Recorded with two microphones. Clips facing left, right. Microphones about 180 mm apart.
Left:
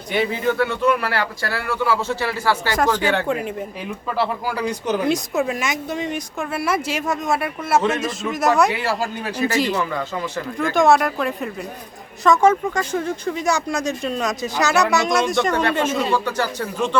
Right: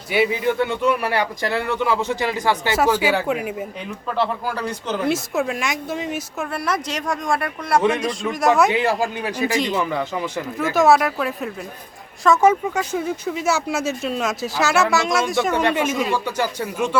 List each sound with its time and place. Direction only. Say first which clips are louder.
0.1 s speech: right 1 dB; 10° right (ahead or behind)
4.1 s speech: even; 10° left (ahead or behind)
5.0 s speech: right 2 dB; centre (ahead or behind)
7.8 s speech: right 2 dB; 15° right (ahead or behind)
8.0 s speech: right 1 dB; centre (ahead or behind)
8.7 s speech: right 3 dB; 20° right (ahead or behind)